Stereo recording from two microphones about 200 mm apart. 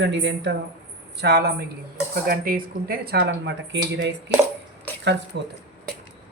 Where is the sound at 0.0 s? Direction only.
65° right (ahead or behind).